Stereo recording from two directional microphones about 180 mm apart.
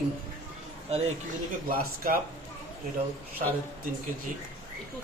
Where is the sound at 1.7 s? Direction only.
55° right (ahead or behind).